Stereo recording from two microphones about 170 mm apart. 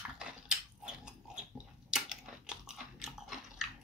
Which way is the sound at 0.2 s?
5° right (ahead or behind).